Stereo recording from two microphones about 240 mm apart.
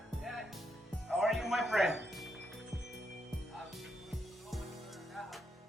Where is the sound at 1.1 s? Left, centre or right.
Centre.